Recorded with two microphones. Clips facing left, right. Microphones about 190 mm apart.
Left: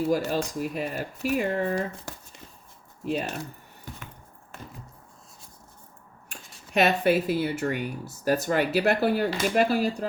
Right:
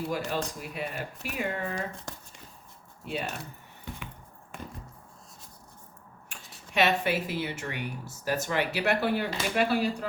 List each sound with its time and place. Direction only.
0.1 s speech: 40° left (ahead or behind)
6.7 s speech: 40° left (ahead or behind)